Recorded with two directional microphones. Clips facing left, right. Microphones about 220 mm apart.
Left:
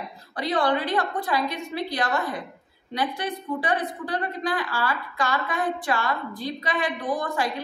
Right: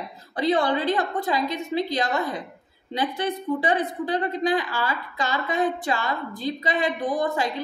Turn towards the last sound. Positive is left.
turn(degrees=-25)  # may be behind; listen again after turning